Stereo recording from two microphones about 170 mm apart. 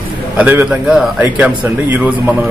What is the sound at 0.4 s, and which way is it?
A man's voice, 10° right (ahead or behind).